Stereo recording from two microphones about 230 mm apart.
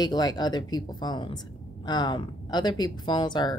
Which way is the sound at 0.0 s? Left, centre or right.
Centre.